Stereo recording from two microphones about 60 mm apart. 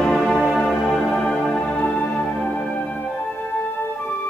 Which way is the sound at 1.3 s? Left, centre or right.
Centre.